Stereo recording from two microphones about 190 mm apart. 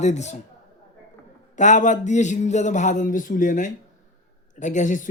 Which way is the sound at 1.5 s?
40° left (ahead or behind).